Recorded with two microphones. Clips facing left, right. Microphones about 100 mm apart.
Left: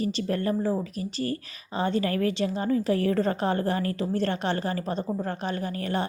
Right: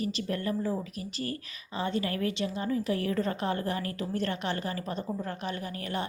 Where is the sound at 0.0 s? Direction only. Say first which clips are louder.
Left 5 dB; 35° left (ahead or behind).